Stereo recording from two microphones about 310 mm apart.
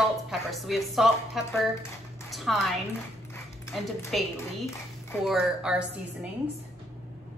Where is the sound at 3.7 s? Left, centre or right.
Centre.